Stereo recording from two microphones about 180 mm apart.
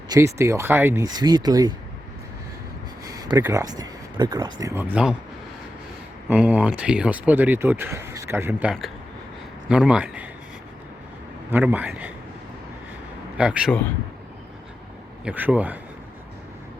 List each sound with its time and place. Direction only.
0.1 s speech: 15° right (ahead or behind)
3.0 s speech: 20° right (ahead or behind)
6.2 s speech: 10° right (ahead or behind)
11.5 s speech: 10° right (ahead or behind)
13.3 s speech: 5° right (ahead or behind)
15.2 s speech: 10° right (ahead or behind)